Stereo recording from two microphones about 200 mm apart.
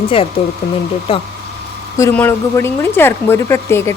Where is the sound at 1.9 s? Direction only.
10° left (ahead or behind).